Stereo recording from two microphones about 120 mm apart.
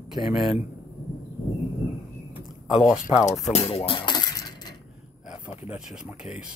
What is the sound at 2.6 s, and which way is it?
Speech, 5° right (ahead or behind).